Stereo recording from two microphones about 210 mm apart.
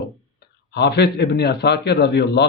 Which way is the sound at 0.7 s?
50° left (ahead or behind).